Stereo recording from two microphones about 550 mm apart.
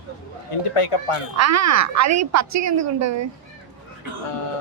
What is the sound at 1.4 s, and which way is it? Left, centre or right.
A woman's voice, right.